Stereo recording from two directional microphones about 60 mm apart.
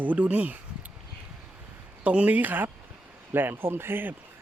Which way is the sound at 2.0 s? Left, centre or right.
Right.